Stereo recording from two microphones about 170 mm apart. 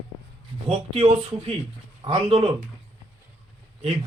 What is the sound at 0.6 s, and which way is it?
Speech, 35° right (ahead or behind).